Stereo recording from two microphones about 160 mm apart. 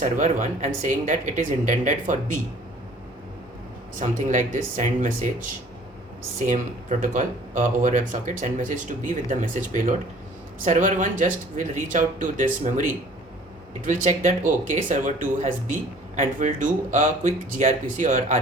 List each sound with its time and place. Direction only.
0.0 s speech: 55° right (ahead or behind)
3.9 s speech: 55° right (ahead or behind)
6.4 s speech: 50° right (ahead or behind)
13.8 s speech: 50° right (ahead or behind)